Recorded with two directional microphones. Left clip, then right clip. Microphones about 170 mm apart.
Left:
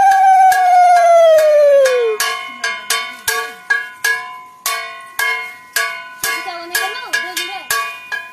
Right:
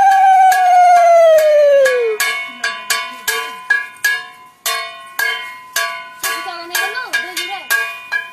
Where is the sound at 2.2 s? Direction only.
15° right (ahead or behind).